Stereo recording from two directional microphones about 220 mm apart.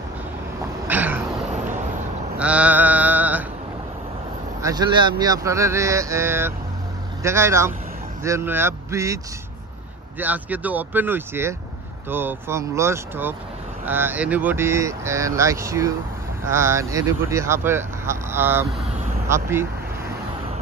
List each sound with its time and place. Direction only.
0.8 s a sound: 10° right (ahead or behind)
2.3 s mantra: 5° right (ahead or behind)
4.6 s speech: 15° right (ahead or behind)